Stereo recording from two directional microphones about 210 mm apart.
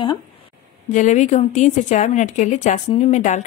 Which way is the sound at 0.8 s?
35° left (ahead or behind).